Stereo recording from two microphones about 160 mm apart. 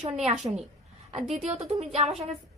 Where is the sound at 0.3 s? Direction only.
40° right (ahead or behind).